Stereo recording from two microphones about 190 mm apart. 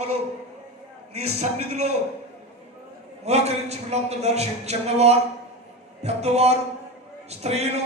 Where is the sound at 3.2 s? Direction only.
35° right (ahead or behind).